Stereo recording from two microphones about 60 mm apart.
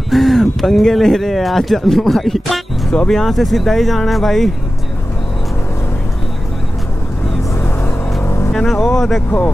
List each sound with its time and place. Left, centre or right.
0.1 s speech: centre
2.9 s speech: centre
7.5 s music: left
8.6 s speech: centre